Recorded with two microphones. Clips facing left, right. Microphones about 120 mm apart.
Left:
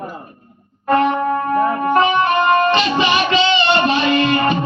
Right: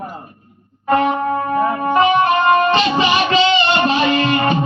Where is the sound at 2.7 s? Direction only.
35° right (ahead or behind).